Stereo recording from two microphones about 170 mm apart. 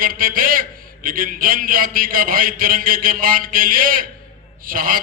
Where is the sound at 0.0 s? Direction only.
55° right (ahead or behind).